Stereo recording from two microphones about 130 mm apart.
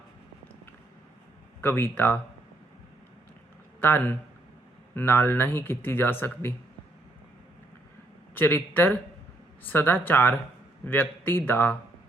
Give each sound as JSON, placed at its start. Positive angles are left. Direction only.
{"t": 1.6, "sound": "speech", "side_deg": 15}
{"t": 3.8, "sound": "speech", "side_deg": 15}
{"t": 8.4, "sound": "speech", "side_deg": 15}